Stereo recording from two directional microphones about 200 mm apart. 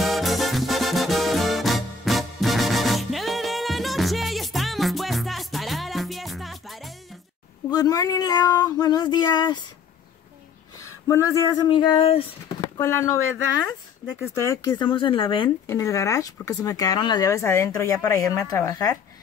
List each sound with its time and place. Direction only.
0.0 s music: centre (ahead or behind)
7.7 s a sound: 20° left (ahead or behind)
11.1 s speech: 15° left (ahead or behind)
12.7 s speech: 15° left (ahead or behind)
14.4 s speech: 15° left (ahead or behind)